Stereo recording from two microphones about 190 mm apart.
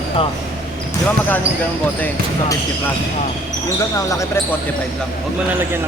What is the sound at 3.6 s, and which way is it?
Speech, 15° left (ahead or behind).